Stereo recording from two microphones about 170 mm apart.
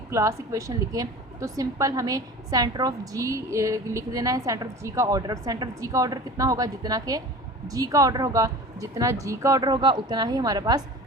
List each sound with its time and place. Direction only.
0.1 s a woman's voice: 20° right (ahead or behind)